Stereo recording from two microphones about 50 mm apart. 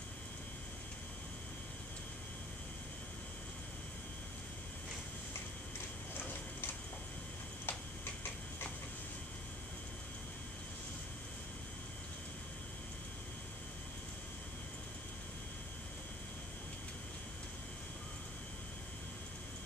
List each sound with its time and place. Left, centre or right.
7.6 s tick-tock: left